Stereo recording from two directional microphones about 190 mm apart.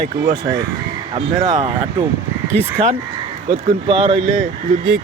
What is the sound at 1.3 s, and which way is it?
Speech, 25° right (ahead or behind).